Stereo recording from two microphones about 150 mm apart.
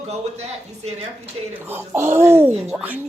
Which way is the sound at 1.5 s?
15° right (ahead or behind).